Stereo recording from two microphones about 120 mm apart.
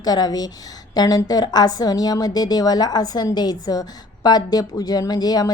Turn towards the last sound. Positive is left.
turn(degrees=35)  # may be behind; listen again after turning